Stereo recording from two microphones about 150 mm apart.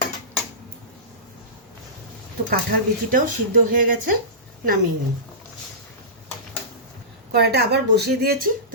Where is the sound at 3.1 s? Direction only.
70° right (ahead or behind).